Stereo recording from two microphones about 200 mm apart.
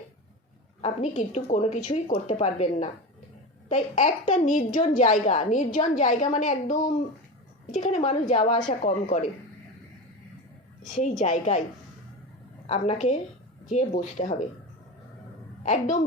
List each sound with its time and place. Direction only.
0.8 s a woman's voice: 30° left (ahead or behind)
11.2 s a woman's voice: 35° left (ahead or behind)
12.6 s a woman's voice: 35° left (ahead or behind)
15.6 s a woman's voice: 40° left (ahead or behind)